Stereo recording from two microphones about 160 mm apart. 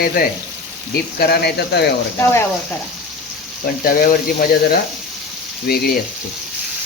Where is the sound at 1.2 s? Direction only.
85° left.